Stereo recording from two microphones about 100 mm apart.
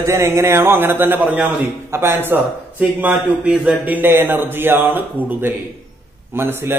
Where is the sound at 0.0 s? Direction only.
30° right (ahead or behind).